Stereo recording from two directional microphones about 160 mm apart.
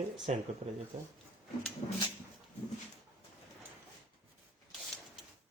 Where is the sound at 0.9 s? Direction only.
40° right (ahead or behind).